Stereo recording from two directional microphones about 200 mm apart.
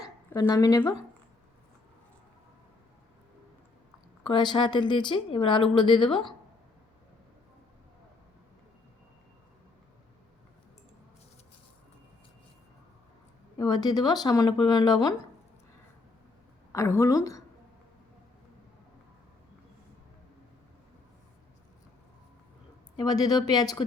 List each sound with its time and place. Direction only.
0.0 s a woman's voice: 20° left (ahead or behind)
4.2 s speech: 25° left (ahead or behind)
13.6 s speech: 20° left (ahead or behind)
16.7 s a woman's voice: 15° left (ahead or behind)
23.0 s speech: 20° left (ahead or behind)